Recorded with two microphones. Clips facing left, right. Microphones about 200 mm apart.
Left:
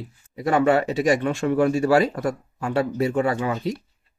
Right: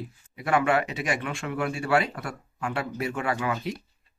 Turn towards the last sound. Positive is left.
turn(degrees=30)  # may be behind; listen again after turning